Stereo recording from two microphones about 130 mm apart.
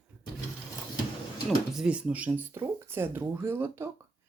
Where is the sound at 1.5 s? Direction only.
5° right (ahead or behind).